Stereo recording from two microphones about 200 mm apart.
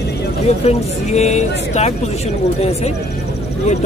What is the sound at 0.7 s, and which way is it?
Speech, 35° left (ahead or behind).